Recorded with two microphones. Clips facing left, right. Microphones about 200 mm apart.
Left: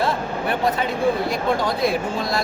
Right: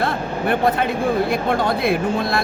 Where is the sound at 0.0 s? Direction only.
55° right (ahead or behind).